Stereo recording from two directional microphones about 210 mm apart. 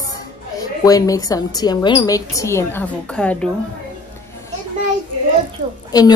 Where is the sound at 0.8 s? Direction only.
15° left (ahead or behind).